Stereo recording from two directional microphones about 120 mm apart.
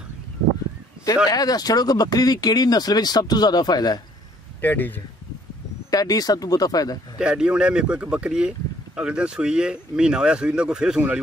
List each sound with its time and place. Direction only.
1.0 s speech: 30° left (ahead or behind)
4.6 s speech: 15° left (ahead or behind)
5.9 s speech: 30° left (ahead or behind)
7.2 s speech: 5° right (ahead or behind)